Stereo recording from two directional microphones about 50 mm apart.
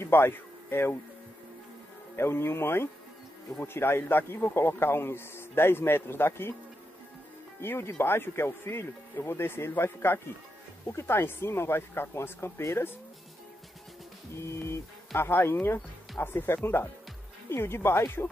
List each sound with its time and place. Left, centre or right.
0.0 s a man's voice: left
2.1 s speech: left
7.6 s speech: left
14.4 s speech: left